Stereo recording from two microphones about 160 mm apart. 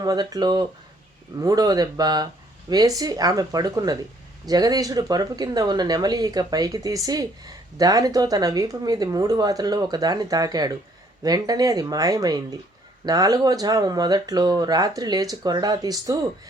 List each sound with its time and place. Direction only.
0.0 s speech: 25° right (ahead or behind)